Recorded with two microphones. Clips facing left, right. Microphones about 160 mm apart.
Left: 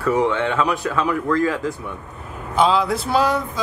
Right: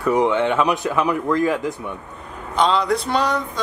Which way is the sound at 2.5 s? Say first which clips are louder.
Left 1 dB; 5° left (ahead or behind).